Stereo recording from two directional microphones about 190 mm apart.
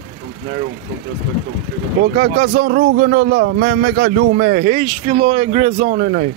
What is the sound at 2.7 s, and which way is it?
Speech, 50° right (ahead or behind).